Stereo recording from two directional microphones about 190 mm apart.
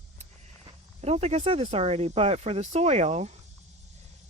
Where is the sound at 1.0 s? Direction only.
35° right (ahead or behind).